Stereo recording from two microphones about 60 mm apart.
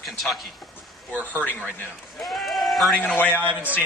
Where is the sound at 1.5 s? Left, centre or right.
Left.